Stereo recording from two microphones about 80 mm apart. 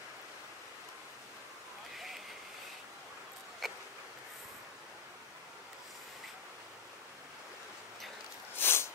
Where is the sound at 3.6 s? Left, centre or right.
Centre.